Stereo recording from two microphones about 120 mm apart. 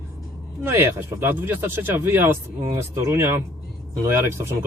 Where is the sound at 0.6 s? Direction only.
20° right (ahead or behind).